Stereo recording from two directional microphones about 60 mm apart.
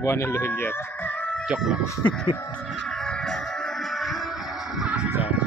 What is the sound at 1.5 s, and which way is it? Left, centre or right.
Speech, centre.